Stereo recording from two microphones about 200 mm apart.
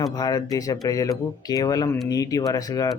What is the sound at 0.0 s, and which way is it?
Speech, 20° left (ahead or behind).